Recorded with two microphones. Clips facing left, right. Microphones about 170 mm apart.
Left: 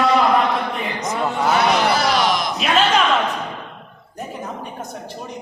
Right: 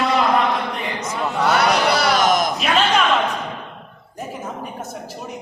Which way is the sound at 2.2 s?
45° right (ahead or behind).